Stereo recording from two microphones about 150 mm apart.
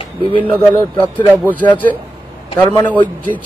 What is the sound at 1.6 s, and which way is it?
Speech, 30° left (ahead or behind).